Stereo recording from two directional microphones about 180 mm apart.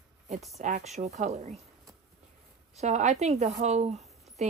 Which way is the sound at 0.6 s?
40° right (ahead or behind).